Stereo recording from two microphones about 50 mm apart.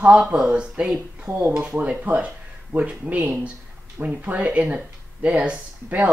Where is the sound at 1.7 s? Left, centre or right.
Right.